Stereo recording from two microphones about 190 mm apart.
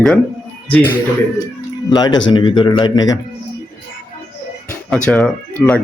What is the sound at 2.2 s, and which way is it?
Speech, 25° left (ahead or behind).